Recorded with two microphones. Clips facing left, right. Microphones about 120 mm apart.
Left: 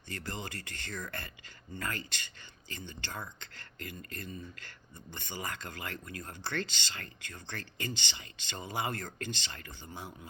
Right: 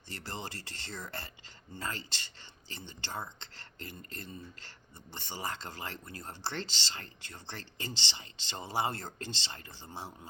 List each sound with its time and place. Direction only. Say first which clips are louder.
0.1 s speech: left 1 dB; 30° right (ahead or behind)